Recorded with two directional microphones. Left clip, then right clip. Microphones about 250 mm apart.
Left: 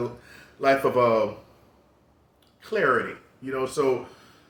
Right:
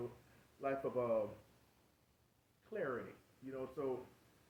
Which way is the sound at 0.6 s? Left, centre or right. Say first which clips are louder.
Left 19 dB; centre.